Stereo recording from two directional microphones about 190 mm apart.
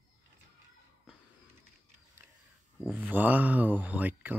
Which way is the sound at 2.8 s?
10° right (ahead or behind).